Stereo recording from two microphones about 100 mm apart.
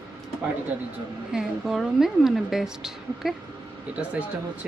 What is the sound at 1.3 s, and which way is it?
Speech, 5° right (ahead or behind).